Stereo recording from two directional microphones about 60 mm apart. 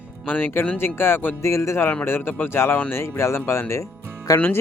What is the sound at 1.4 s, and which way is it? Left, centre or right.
Speech, left.